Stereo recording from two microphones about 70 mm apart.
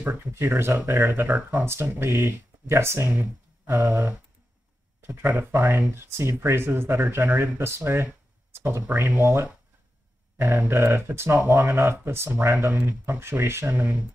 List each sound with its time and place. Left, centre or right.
0.0 s speech: right
1.7 s speech: right
3.2 s a sound: right
5.0 s speech: right
8.5 s a sound: right
9.1 s speech: right